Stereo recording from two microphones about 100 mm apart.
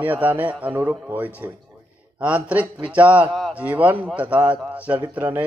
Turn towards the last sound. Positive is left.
turn(degrees=-20)  # may be behind; listen again after turning